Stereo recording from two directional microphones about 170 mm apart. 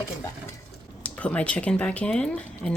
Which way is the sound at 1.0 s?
10° left (ahead or behind).